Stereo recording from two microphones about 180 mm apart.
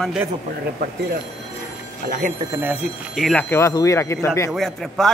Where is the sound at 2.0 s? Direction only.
50° right (ahead or behind).